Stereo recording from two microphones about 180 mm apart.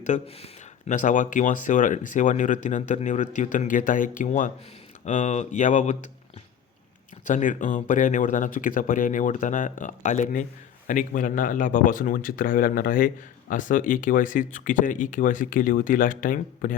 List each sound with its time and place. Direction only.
0.0 s speech: 40° left (ahead or behind)
7.3 s speech: 45° left (ahead or behind)